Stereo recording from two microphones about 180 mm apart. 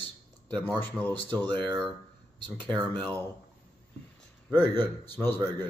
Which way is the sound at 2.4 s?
10° left (ahead or behind).